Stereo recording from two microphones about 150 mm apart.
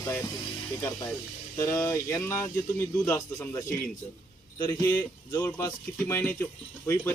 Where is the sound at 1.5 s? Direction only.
15° left (ahead or behind).